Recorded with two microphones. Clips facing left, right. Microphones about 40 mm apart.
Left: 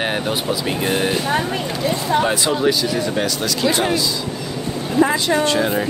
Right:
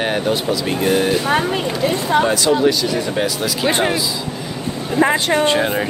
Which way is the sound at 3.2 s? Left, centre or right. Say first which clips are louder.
Right 1 dB; centre.